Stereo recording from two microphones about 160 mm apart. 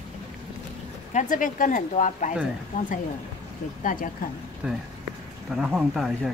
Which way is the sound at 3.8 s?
55° left (ahead or behind).